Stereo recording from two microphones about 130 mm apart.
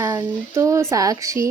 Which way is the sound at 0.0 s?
25° right (ahead or behind).